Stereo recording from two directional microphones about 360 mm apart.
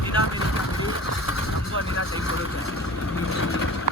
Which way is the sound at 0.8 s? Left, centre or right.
Left.